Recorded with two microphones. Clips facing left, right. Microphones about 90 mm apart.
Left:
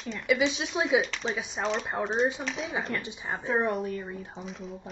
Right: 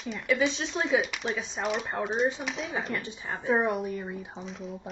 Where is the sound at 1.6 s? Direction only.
10° right (ahead or behind).